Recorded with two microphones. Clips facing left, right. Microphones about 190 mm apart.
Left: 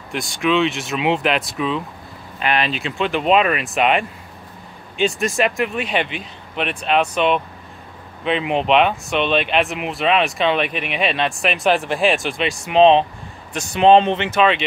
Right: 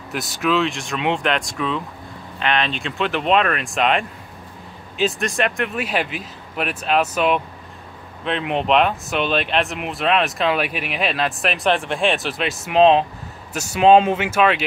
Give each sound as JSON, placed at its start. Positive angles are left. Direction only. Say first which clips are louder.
{"t": 0.1, "sound": "speech", "louder": "left 2 dB", "side_deg": -5}